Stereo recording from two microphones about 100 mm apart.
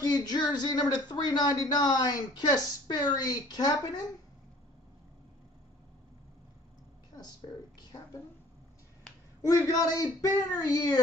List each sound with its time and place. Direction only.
0.0 s speech: 40° left (ahead or behind)
7.2 s a sound: 45° left (ahead or behind)
9.4 s a man's voice: 35° left (ahead or behind)